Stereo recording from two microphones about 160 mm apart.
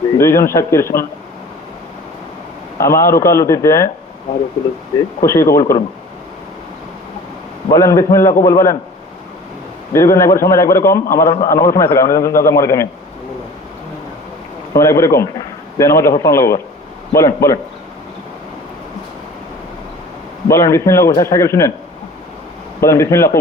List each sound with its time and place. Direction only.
0.2 s speech: 15° left (ahead or behind)
2.7 s a man's voice: 20° left (ahead or behind)
5.2 s speech: 15° left (ahead or behind)
7.7 s a man's voice: 20° left (ahead or behind)
9.9 s a man's voice: 20° left (ahead or behind)
14.7 s a man's voice: 20° left (ahead or behind)
20.5 s a man's voice: 20° left (ahead or behind)
22.8 s speech: 20° left (ahead or behind)